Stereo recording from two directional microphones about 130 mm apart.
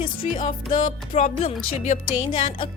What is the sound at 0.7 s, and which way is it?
Speech, 65° left (ahead or behind).